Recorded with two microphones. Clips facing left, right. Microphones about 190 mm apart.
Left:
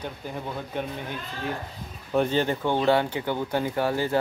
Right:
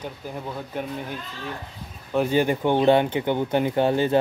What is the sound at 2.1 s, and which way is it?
Speech, 10° right (ahead or behind).